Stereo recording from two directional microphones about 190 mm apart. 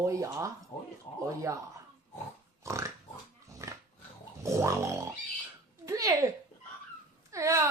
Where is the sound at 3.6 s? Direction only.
15° right (ahead or behind).